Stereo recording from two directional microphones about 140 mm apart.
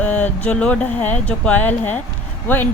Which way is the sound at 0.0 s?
10° left (ahead or behind).